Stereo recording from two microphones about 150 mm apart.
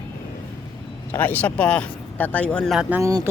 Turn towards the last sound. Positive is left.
turn(degrees=-20)  # may be behind; listen again after turning